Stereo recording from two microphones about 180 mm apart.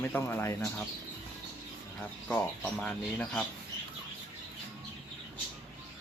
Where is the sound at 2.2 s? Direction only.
10° left (ahead or behind).